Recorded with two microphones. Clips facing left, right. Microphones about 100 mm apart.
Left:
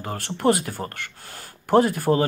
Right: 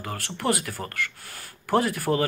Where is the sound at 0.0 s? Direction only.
25° left (ahead or behind).